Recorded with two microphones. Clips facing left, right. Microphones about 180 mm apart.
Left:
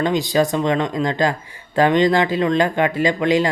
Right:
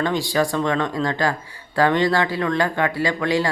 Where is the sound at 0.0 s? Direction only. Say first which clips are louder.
Left 3 dB; 20° left (ahead or behind).